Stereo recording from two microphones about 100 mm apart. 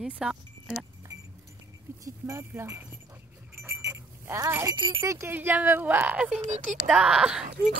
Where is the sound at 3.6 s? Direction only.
25° right (ahead or behind).